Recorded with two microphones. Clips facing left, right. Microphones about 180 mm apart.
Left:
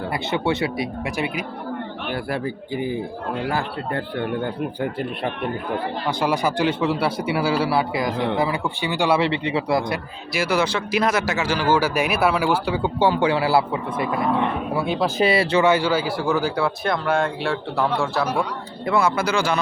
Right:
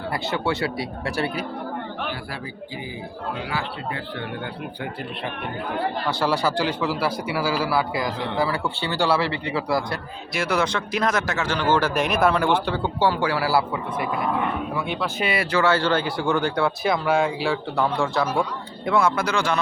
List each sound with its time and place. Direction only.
0.1 s a man's voice: 20° left (ahead or behind)
3.4 s speech: 50° left (ahead or behind)
6.1 s a man's voice: 15° left (ahead or behind)
10.3 s speech: 5° left (ahead or behind); by 14.1 s 25° left (ahead or behind)
14.8 s speech: 40° left (ahead or behind)
15.6 s speech: 10° left (ahead or behind)